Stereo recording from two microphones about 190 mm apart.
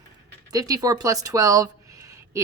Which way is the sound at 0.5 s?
20° right (ahead or behind).